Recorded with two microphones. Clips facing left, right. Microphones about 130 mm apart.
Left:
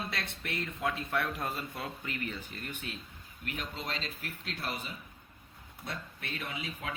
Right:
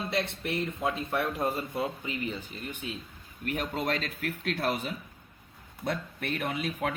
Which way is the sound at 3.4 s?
50° right (ahead or behind).